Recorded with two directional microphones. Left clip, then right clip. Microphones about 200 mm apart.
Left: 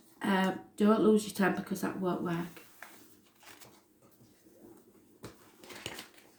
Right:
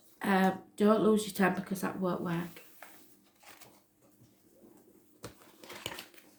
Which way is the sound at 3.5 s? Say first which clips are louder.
Left 1 dB; 10° right (ahead or behind).